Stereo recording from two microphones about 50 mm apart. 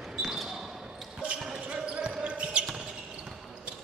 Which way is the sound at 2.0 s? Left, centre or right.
Right.